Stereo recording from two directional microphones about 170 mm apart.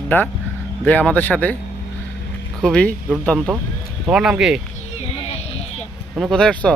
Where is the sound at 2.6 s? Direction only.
5° left (ahead or behind).